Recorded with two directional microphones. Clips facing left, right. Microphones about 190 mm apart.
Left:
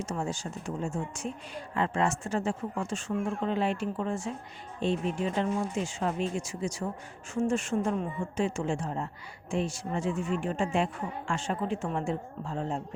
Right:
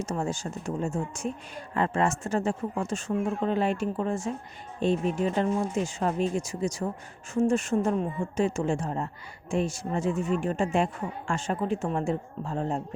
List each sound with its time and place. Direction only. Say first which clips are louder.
0.0 s speech: right 3 dB; 45° right (ahead or behind)